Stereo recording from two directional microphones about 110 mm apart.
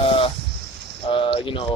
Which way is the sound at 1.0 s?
55° left (ahead or behind).